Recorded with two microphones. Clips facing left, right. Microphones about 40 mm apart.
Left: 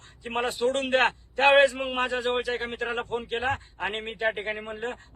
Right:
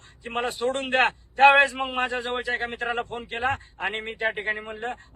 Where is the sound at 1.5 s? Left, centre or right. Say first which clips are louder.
Right 1 dB; right.